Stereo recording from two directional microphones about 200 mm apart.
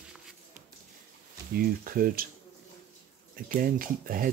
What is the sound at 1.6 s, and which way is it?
Speech, 45° right (ahead or behind).